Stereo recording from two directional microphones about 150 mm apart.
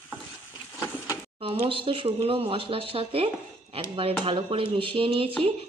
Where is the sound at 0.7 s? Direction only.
20° left (ahead or behind).